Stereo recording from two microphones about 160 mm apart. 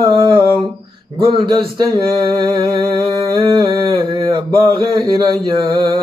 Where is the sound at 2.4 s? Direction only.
30° right (ahead or behind).